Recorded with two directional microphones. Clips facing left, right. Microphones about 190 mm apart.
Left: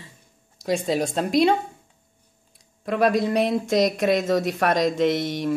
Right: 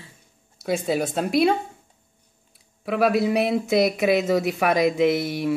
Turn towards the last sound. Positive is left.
turn(degrees=-10)  # may be behind; listen again after turning